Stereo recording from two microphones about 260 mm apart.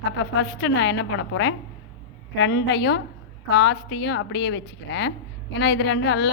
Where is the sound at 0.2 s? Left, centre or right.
Left.